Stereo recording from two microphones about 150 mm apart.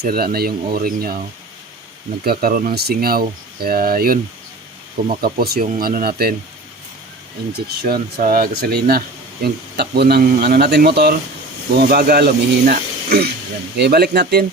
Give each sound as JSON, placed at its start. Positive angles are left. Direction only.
{"t": 0.0, "sound": "speech", "side_deg": -80}
{"t": 2.2, "sound": "speech", "side_deg": -85}
{"t": 5.2, "sound": "speech", "side_deg": -90}
{"t": 5.8, "sound": "speech", "side_deg": -80}
{"t": 7.5, "sound": "speech", "side_deg": -90}